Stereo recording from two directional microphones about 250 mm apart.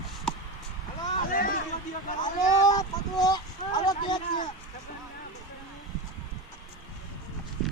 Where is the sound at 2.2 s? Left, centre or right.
Centre.